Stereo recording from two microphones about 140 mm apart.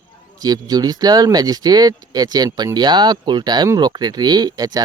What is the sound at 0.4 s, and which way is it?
Speech, 25° right (ahead or behind).